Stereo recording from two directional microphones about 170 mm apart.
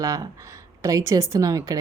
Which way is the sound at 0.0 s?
20° right (ahead or behind).